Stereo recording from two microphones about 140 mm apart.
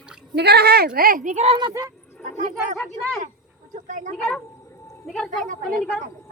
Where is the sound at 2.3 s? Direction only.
60° right (ahead or behind).